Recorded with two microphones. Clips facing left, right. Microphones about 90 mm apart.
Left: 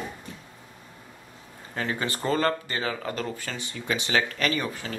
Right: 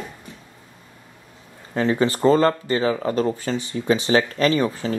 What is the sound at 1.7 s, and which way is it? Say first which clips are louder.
Speech: right 10 dB; 30° right (ahead or behind).